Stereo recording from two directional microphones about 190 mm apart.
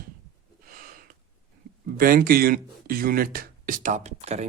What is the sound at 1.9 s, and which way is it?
Speech, 50° right (ahead or behind).